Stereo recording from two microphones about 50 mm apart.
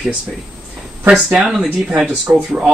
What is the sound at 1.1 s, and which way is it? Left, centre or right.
Speech, centre.